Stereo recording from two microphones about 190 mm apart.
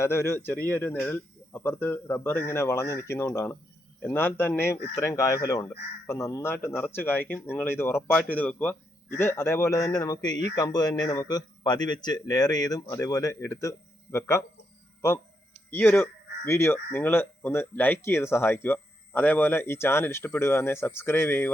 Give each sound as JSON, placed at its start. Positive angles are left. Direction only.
{"t": 0.0, "sound": "a man's voice", "side_deg": 15}
{"t": 15.7, "sound": "speech", "side_deg": 10}